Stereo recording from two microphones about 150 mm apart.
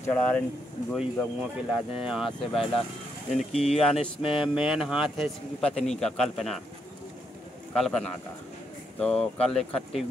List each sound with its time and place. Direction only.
0.0 s speech: 10° left (ahead or behind)
0.9 s a man's voice: 5° right (ahead or behind)
3.5 s speech: 45° left (ahead or behind)
4.4 s a man's voice: 5° right (ahead or behind)
7.7 s a man's voice: 5° left (ahead or behind)